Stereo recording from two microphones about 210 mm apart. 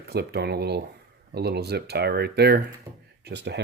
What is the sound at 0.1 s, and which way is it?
Speech, 50° right (ahead or behind).